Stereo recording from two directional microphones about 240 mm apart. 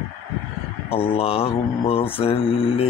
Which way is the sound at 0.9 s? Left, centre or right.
Left.